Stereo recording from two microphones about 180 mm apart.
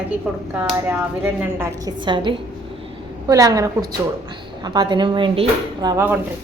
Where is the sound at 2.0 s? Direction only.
25° right (ahead or behind).